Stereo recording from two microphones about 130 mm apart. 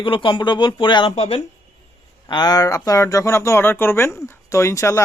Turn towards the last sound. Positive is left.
turn(degrees=20)  # may be behind; listen again after turning